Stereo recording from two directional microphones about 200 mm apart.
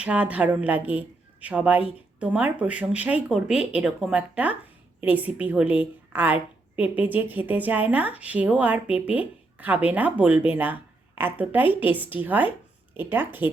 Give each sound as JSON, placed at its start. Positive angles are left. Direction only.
{"t": 0.0, "sound": "a woman's voice", "side_deg": -5}